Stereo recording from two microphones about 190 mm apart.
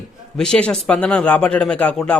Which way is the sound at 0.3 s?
5° left (ahead or behind).